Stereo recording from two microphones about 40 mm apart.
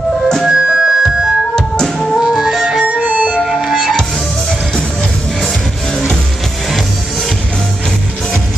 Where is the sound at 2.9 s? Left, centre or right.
Right.